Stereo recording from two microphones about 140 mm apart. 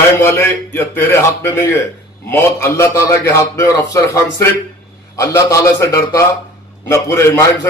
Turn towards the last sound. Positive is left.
turn(degrees=20)  # may be behind; listen again after turning